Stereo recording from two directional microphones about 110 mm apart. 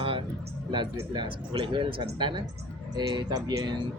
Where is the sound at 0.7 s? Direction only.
45° right (ahead or behind).